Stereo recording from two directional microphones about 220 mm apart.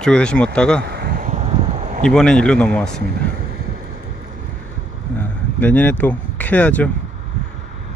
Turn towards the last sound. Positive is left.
turn(degrees=5)  # may be behind; listen again after turning